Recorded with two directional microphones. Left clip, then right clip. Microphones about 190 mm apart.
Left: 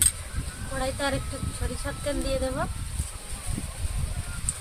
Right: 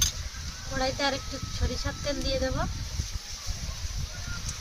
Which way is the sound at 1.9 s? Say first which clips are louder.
Left 2 dB; 15° right (ahead or behind).